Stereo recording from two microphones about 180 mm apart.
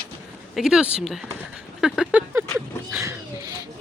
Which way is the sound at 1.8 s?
5° right (ahead or behind).